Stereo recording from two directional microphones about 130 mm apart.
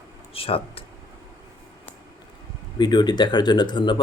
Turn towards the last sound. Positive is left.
turn(degrees=35)  # may be behind; listen again after turning